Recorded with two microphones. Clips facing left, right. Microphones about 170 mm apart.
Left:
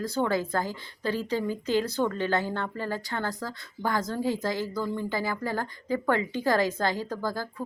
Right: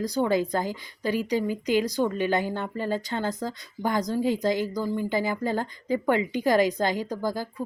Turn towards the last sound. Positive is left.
turn(degrees=-15)  # may be behind; listen again after turning